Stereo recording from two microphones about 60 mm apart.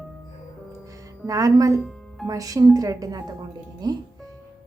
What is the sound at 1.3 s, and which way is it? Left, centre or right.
A woman's voice, right.